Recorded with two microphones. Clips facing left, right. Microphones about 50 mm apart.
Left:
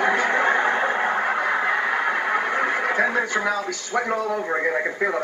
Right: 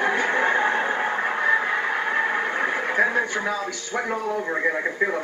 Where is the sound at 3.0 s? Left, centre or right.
Left.